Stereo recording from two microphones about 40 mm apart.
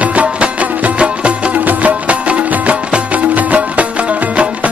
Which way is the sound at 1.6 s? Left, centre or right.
Right.